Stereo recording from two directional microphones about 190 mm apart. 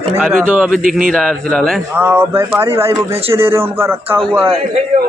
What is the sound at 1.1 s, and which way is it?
Speech, 5° left (ahead or behind).